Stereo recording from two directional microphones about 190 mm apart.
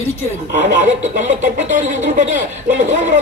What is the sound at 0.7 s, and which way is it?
Speech, 40° right (ahead or behind).